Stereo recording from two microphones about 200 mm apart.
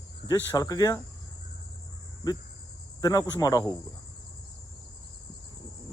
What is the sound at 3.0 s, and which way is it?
Cricket, 20° left (ahead or behind).